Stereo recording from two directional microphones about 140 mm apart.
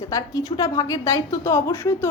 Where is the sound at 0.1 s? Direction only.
25° left (ahead or behind).